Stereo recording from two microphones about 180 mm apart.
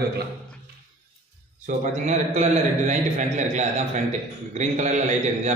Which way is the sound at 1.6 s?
40° right (ahead or behind).